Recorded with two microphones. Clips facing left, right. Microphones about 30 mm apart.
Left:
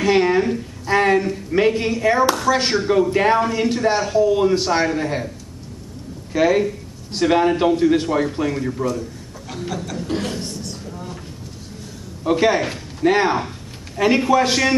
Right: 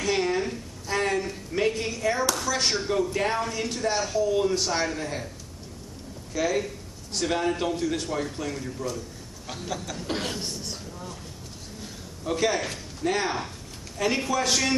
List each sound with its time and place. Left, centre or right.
0.0 s a woman's voice: left
6.3 s speech: left
9.7 s speech: centre
10.0 s speech: centre
10.4 s a sound: centre
10.9 s vehicle: left
12.2 s speech: left